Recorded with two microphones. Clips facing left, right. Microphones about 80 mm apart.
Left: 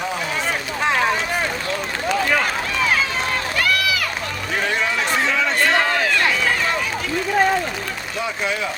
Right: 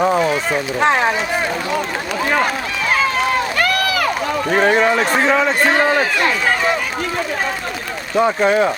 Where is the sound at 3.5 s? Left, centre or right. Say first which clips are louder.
Right 3 dB; right.